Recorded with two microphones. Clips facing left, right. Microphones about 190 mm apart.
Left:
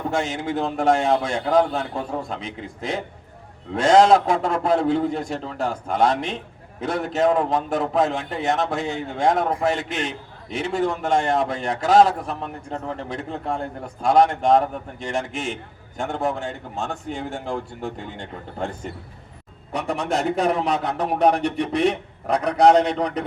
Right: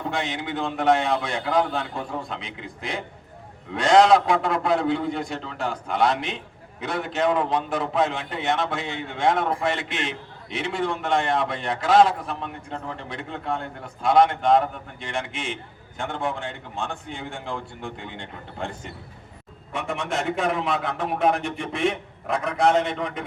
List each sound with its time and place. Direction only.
0.1 s a man's voice: 45° left (ahead or behind)
19.7 s a man's voice: 35° left (ahead or behind)